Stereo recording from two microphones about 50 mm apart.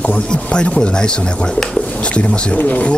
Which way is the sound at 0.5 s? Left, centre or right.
Left.